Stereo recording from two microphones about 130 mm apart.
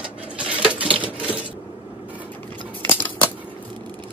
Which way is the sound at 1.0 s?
10° right (ahead or behind).